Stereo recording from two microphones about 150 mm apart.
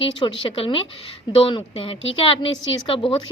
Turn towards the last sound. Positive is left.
turn(degrees=35)  # may be behind; listen again after turning